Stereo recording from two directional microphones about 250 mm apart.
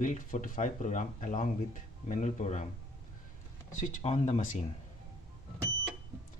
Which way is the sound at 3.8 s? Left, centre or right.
Left.